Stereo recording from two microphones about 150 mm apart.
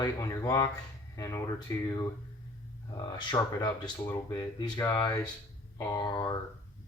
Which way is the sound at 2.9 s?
30° left (ahead or behind).